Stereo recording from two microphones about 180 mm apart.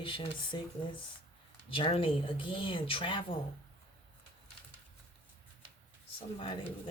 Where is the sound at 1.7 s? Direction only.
30° left (ahead or behind).